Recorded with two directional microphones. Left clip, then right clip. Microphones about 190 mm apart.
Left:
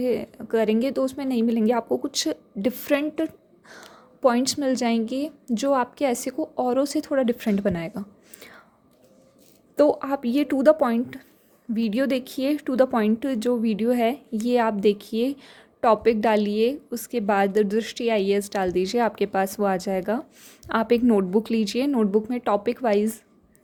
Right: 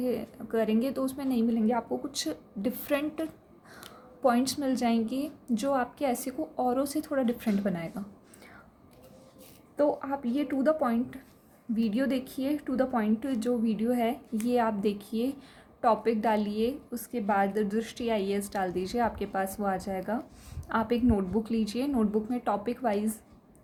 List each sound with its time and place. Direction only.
0.0 s a woman's voice: 45° left (ahead or behind)
9.7 s a woman's voice: 60° left (ahead or behind)